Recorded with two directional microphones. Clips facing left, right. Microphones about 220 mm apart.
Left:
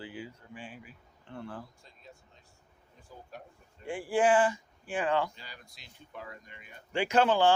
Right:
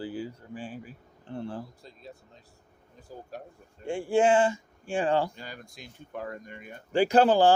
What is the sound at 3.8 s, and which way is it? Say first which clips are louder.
Speech: right 3 dB; 25° right (ahead or behind).